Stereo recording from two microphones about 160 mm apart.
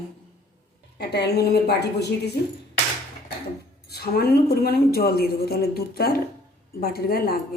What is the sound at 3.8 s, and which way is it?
A woman's voice, 75° left (ahead or behind).